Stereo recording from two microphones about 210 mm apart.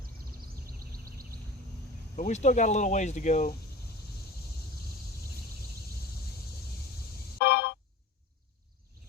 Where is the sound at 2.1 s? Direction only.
35° left (ahead or behind).